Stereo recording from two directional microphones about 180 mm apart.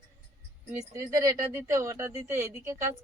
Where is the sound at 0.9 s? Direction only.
15° right (ahead or behind).